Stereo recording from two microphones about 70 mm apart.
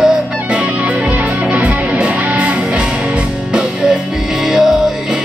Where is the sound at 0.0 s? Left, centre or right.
Centre.